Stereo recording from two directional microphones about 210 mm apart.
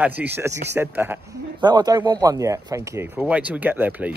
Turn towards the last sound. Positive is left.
turn(degrees=-10)  # may be behind; listen again after turning